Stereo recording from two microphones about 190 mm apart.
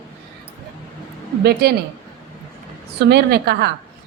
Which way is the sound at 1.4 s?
55° right (ahead or behind).